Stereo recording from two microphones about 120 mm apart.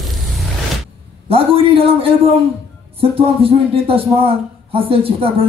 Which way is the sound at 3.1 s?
50° right (ahead or behind).